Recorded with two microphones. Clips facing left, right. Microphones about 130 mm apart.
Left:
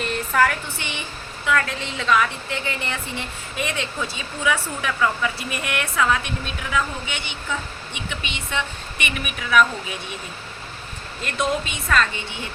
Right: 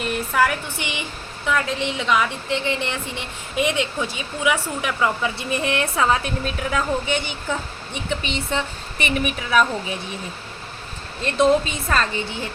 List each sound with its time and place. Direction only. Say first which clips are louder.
0.0 s a woman's voice: even; 10° right (ahead or behind); by 9.6 s 30° right (ahead or behind)
11.2 s a woman's voice: right 7 dB; 30° right (ahead or behind)